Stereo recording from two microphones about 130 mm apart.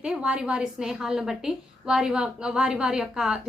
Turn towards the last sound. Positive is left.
turn(degrees=-5)  # may be behind; listen again after turning